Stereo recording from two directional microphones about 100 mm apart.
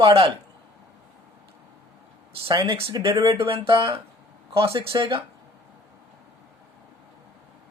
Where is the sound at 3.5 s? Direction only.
65° right (ahead or behind).